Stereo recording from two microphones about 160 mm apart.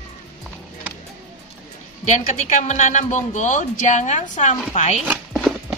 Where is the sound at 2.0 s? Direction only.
50° left (ahead or behind).